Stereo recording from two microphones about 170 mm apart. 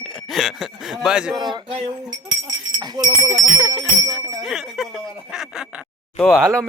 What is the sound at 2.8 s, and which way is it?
Sheep, 25° right (ahead or behind).